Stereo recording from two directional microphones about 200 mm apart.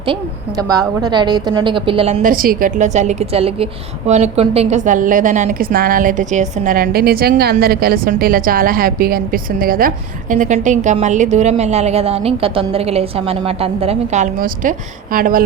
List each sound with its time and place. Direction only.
0.0 s a woman's voice: 20° right (ahead or behind)
2.2 s a woman's voice: 45° right (ahead or behind)